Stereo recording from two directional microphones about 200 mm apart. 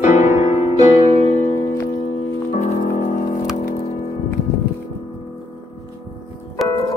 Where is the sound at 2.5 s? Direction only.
40° left (ahead or behind).